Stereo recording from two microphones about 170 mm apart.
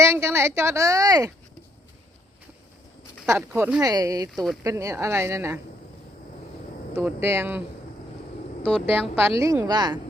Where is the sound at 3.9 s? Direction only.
20° right (ahead or behind).